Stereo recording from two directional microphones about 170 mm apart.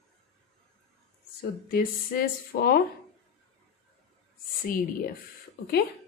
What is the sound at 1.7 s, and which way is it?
Speech, 60° left (ahead or behind).